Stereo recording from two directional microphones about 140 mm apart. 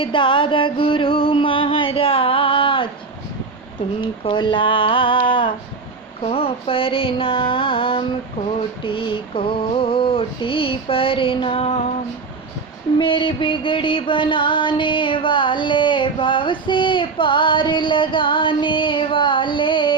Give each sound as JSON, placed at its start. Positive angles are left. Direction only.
{"t": 0.0, "sound": "music", "side_deg": 35}
{"t": 4.0, "sound": "music", "side_deg": 35}
{"t": 13.0, "sound": "music", "side_deg": 35}